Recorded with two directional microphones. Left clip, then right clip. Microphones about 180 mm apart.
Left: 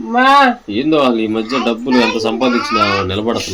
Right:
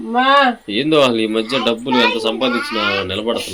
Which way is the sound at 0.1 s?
35° right (ahead or behind).